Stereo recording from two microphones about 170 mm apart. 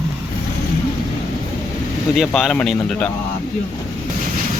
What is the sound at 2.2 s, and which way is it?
Speech, centre (ahead or behind).